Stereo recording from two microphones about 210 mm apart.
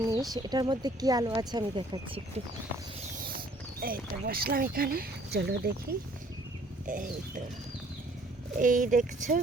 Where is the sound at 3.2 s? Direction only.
45° right (ahead or behind).